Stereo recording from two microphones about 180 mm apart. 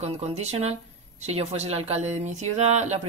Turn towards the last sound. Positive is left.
turn(degrees=-40)  # may be behind; listen again after turning